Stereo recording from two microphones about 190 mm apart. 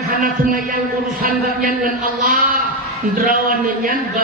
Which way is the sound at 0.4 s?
45° right (ahead or behind).